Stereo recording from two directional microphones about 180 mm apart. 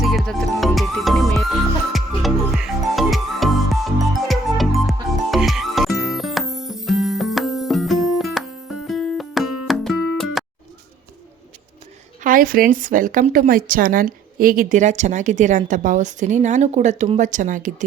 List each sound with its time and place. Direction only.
0.0 s music: centre (ahead or behind)
12.2 s a woman's voice: 50° right (ahead or behind)